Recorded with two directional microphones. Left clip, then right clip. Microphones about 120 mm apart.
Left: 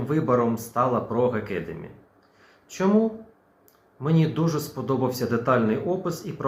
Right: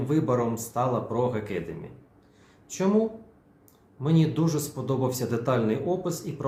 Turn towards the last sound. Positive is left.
turn(degrees=-25)  # may be behind; listen again after turning